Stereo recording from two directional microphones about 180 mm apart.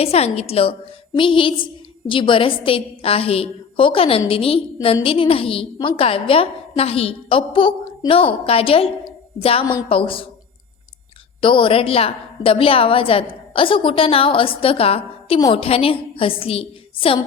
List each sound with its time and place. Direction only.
0.0 s a woman's voice: 35° left (ahead or behind)
11.3 s a woman's voice: 30° left (ahead or behind)